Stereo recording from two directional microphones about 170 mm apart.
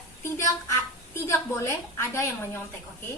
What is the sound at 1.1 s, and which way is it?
A woman's voice, 15° left (ahead or behind).